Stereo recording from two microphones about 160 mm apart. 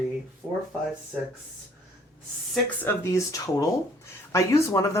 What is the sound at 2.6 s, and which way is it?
Speech, 15° left (ahead or behind).